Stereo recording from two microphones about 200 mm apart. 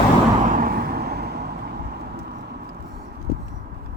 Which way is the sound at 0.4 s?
45° right (ahead or behind).